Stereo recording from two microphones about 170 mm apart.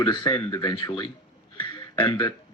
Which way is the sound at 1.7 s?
30° left (ahead or behind).